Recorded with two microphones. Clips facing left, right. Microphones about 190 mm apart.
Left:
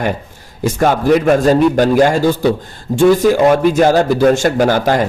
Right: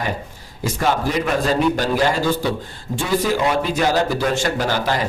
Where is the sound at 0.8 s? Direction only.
50° left (ahead or behind).